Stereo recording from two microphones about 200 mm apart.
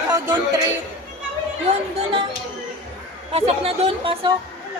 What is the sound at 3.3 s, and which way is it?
Speech, 30° right (ahead or behind).